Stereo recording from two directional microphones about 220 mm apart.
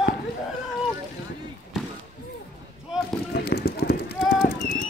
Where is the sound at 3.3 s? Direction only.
45° left (ahead or behind).